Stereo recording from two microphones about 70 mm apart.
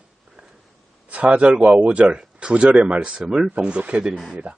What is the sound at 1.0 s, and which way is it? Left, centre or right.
Speech, right.